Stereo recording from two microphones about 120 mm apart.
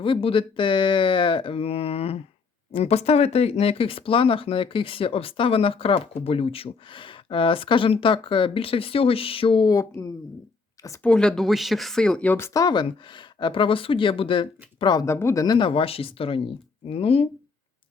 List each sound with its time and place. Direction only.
0.0 s speech: 50° left (ahead or behind)
9.7 s speech: 25° left (ahead or behind)
11.0 s speech: 5° left (ahead or behind)
12.5 s speech: 35° left (ahead or behind)
15.0 s speech: 25° left (ahead or behind)
15.4 s speech: 45° left (ahead or behind)